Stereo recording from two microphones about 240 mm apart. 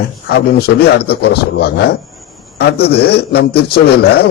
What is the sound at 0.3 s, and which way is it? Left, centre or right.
A man's voice, left.